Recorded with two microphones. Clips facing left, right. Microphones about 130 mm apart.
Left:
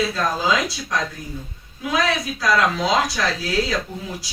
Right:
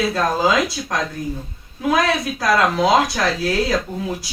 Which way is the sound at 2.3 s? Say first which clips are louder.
Right 2 dB; 55° right (ahead or behind).